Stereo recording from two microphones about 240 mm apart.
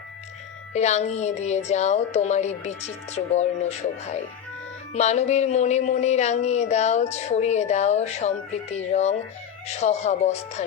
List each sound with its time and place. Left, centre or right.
0.7 s speech: left